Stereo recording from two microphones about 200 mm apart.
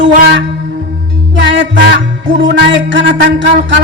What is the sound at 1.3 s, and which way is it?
Music, 65° right (ahead or behind).